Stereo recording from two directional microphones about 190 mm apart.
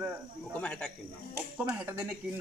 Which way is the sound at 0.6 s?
5° left (ahead or behind).